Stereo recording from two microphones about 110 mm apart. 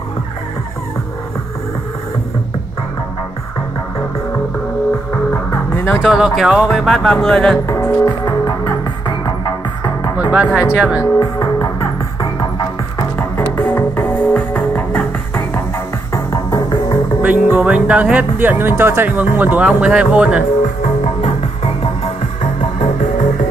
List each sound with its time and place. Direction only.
6.0 s speech: centre (ahead or behind)
7.6 s music: 25° left (ahead or behind)
8.0 s music: 45° left (ahead or behind)
10.3 s speech: 10° right (ahead or behind)
11.1 s music: 45° left (ahead or behind)
13.6 s music: 20° left (ahead or behind)
16.1 s music: 30° left (ahead or behind)
17.5 s speech: 10° right (ahead or behind)